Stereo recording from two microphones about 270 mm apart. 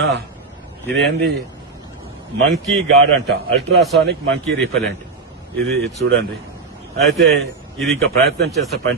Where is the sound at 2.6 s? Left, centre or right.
Right.